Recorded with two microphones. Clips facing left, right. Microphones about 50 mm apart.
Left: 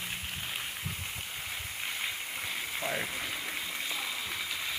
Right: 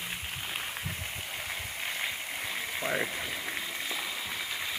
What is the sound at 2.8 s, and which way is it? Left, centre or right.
Speech, right.